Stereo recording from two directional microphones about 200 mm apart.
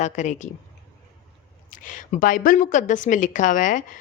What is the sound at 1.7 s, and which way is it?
A woman's voice, 40° left (ahead or behind).